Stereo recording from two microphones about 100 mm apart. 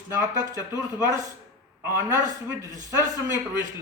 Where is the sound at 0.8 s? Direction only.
35° right (ahead or behind).